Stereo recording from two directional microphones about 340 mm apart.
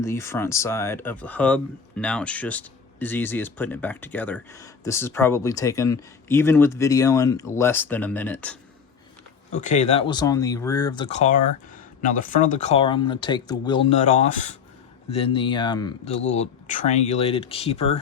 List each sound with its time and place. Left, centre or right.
0.0 s speech: centre
9.5 s speech: left